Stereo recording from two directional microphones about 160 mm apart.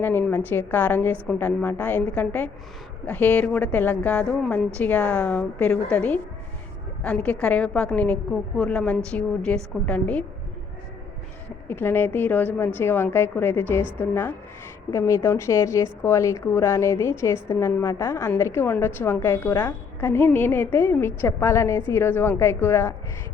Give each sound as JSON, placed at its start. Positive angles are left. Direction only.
{"t": 0.0, "sound": "a woman's voice", "side_deg": 10}
{"t": 11.7, "sound": "a woman's voice", "side_deg": 15}